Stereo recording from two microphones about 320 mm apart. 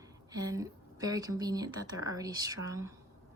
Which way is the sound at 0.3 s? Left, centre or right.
Centre.